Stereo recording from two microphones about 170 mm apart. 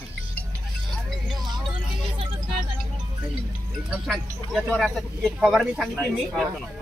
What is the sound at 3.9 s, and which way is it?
Music, 5° right (ahead or behind).